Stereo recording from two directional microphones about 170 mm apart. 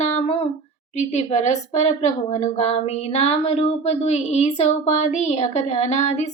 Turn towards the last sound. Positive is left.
turn(degrees=40)  # may be behind; listen again after turning